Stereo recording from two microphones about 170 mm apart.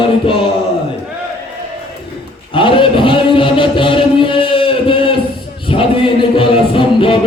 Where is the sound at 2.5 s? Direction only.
30° left (ahead or behind).